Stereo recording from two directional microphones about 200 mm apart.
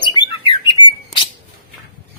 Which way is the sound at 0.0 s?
25° left (ahead or behind).